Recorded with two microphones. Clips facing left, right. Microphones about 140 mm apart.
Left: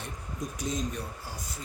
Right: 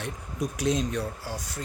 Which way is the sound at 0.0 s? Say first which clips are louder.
Right 6 dB; 75° right (ahead or behind).